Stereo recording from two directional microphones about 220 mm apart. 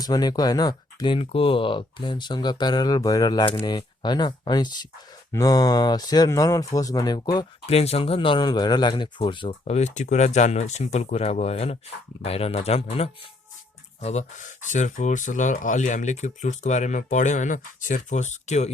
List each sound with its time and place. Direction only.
0.0 s speech: 15° left (ahead or behind)